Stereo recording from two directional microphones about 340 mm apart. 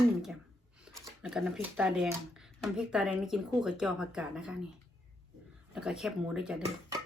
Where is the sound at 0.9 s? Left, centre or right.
Centre.